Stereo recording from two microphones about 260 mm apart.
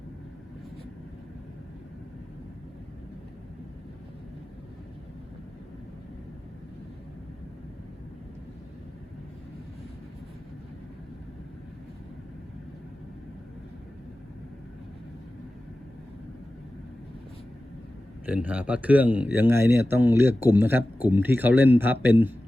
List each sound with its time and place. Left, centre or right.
18.3 s speech: centre